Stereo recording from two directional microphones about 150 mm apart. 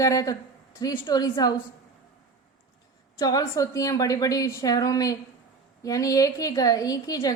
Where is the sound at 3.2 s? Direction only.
25° left (ahead or behind).